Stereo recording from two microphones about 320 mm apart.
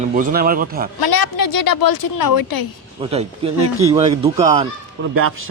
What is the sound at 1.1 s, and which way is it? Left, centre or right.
A woman's voice, left.